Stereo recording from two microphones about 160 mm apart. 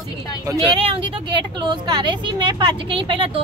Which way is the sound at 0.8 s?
35° right (ahead or behind).